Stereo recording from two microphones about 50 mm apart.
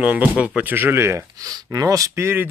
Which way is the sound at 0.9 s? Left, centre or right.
Right.